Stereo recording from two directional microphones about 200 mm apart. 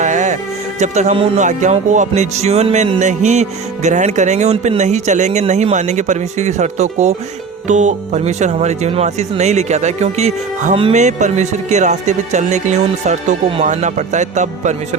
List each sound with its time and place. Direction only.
0.0 s music: 35° right (ahead or behind)
0.8 s speech: 35° right (ahead or behind)